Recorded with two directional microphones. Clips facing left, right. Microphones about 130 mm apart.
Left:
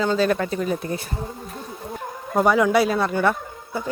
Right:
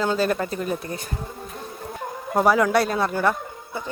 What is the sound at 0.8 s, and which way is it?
Speech, 30° left (ahead or behind).